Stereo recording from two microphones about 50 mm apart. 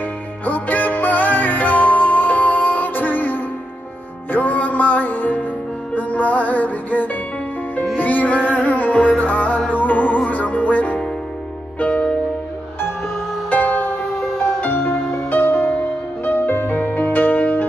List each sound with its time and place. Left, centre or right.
0.5 s music: left
13.5 s music: left